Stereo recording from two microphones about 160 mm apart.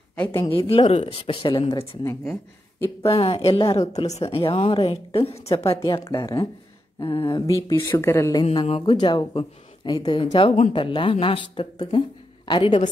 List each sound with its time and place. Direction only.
0.1 s speech: 10° left (ahead or behind)
0.5 s speech: 35° left (ahead or behind)
3.0 s speech: 35° left (ahead or behind)
5.8 s speech: 20° left (ahead or behind)
8.5 s speech: 35° left (ahead or behind)